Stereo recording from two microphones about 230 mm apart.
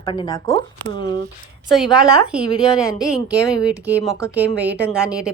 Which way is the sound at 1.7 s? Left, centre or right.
Centre.